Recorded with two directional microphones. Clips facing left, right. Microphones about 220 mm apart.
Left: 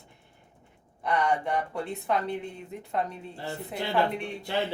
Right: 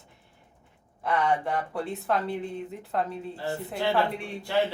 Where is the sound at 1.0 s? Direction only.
5° right (ahead or behind).